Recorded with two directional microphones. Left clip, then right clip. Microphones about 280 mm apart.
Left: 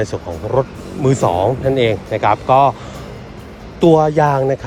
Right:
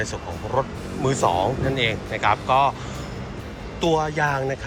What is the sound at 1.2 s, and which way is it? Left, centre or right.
Speech, left.